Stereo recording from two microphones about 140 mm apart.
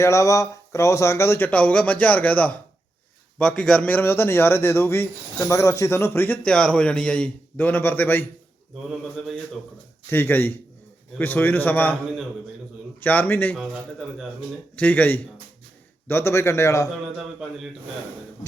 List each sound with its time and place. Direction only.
0.0 s a man's voice: 20° left (ahead or behind)
8.9 s mantra: centre (ahead or behind)
10.1 s a man's voice: 15° left (ahead or behind)
13.0 s a man's voice: 15° left (ahead or behind)
14.8 s a man's voice: 10° left (ahead or behind)